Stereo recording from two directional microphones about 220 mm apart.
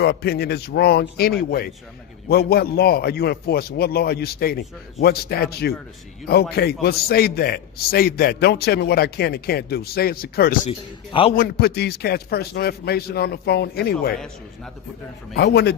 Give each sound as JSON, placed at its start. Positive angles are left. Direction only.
{"t": 0.0, "sound": "a man's voice", "side_deg": 45}
{"t": 10.7, "sound": "a man's voice", "side_deg": 25}
{"t": 11.3, "sound": "a man's voice", "side_deg": 45}
{"t": 15.4, "sound": "a man's voice", "side_deg": 50}